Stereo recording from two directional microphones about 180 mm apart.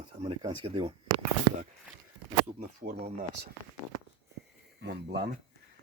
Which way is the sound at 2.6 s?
60° right (ahead or behind).